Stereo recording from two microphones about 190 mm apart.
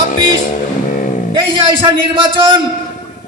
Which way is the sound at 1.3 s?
25° right (ahead or behind).